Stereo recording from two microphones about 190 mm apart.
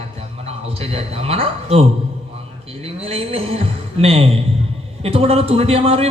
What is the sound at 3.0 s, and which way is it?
A man's voice, 30° right (ahead or behind).